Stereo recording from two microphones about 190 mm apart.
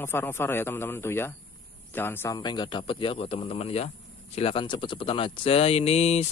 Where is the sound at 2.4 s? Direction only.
25° left (ahead or behind).